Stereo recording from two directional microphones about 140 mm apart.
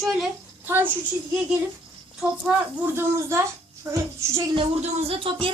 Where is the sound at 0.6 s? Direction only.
15° right (ahead or behind).